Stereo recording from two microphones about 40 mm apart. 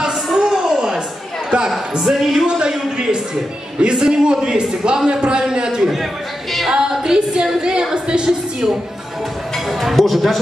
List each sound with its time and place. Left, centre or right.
0.0 s a sound: centre
2.0 s speech: centre
2.4 s a man's voice: right
9.7 s speech: centre